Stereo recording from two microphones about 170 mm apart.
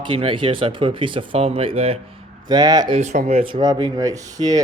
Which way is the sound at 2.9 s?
45° right (ahead or behind).